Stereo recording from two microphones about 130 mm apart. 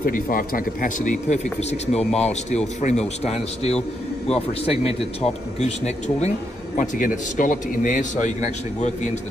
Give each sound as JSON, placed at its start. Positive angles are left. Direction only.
{"t": 0.1, "sound": "a man's voice", "side_deg": 90}
{"t": 6.8, "sound": "a man's voice", "side_deg": 90}